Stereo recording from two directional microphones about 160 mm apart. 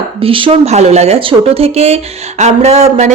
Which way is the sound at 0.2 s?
35° right (ahead or behind).